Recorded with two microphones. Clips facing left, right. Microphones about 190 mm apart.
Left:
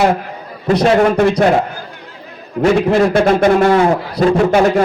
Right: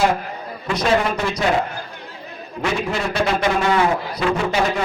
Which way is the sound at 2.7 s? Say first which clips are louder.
Left 9 dB; 55° left (ahead or behind).